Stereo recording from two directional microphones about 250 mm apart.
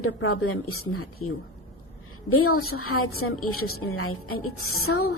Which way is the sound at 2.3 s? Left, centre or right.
Left.